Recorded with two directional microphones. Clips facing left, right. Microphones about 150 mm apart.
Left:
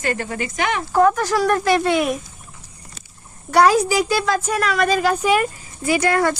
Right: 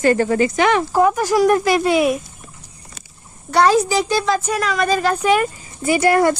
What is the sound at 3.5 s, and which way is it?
A woman's voice, 10° left (ahead or behind).